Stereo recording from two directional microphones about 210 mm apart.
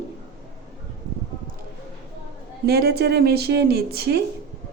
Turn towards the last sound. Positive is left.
turn(degrees=-50)  # may be behind; listen again after turning